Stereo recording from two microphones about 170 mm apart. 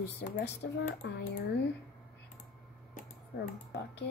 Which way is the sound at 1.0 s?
85° left.